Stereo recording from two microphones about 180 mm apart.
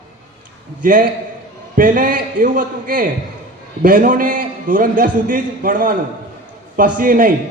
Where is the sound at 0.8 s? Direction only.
50° right (ahead or behind).